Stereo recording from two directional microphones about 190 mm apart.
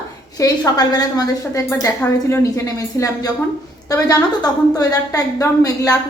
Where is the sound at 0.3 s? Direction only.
20° left (ahead or behind).